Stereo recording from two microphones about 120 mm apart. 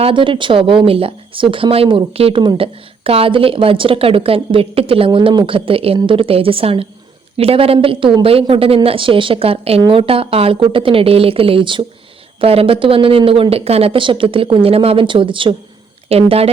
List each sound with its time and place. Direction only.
0.0 s speech: 45° right (ahead or behind)
16.1 s speech: 55° right (ahead or behind)